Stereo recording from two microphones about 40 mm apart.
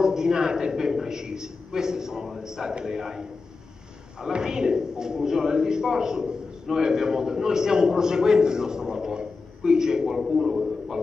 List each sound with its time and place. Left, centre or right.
0.0 s a man's voice: centre